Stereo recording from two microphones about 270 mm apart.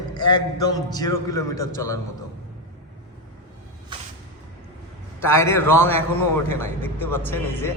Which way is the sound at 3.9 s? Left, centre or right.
Centre.